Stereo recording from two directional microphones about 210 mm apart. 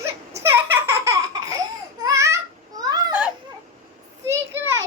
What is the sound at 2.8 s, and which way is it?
Children playing, 20° right (ahead or behind).